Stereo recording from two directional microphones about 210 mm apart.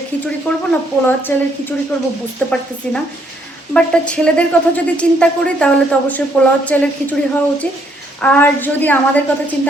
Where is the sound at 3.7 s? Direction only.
5° left (ahead or behind).